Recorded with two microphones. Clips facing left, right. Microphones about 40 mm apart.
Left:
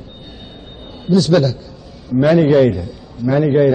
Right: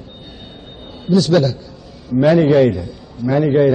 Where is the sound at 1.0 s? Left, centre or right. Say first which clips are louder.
Left 1 dB; centre.